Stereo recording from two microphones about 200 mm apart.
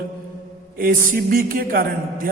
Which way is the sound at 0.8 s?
45° right (ahead or behind).